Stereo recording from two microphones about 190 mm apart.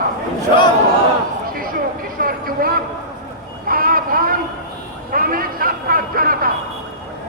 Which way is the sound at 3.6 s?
50° right (ahead or behind).